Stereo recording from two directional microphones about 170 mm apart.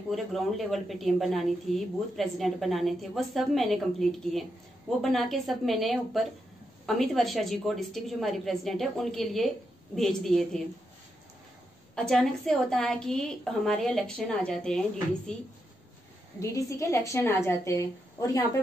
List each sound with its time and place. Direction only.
0.1 s a woman's voice: centre (ahead or behind)
11.9 s a woman's voice: 5° left (ahead or behind)
16.3 s a woman's voice: 20° left (ahead or behind)